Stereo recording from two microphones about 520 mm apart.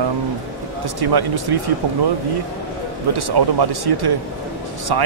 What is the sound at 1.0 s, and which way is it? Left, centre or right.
Speech, right.